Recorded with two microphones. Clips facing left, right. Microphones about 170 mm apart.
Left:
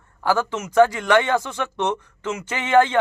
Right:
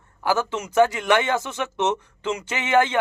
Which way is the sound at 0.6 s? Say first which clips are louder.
Left 3 dB; 25° right (ahead or behind).